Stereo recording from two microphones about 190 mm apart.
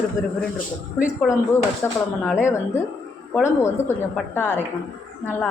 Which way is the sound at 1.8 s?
10° left (ahead or behind).